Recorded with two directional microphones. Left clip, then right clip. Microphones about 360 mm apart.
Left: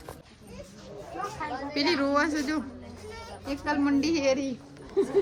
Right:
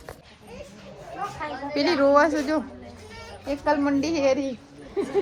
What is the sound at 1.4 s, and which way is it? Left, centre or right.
A woman's voice, centre.